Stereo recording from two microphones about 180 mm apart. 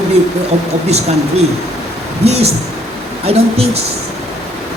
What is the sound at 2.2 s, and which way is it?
A man's voice, 35° right (ahead or behind).